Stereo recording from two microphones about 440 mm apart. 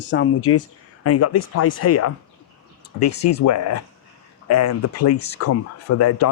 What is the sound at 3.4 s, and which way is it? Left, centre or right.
Speech, left.